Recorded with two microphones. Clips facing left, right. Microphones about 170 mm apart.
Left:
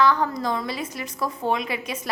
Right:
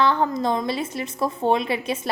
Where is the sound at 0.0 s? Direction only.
25° right (ahead or behind).